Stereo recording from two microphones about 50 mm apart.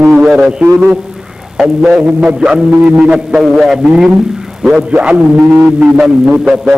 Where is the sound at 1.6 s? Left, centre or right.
Centre.